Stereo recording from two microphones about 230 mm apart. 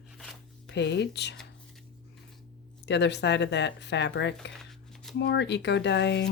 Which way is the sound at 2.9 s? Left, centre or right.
Left.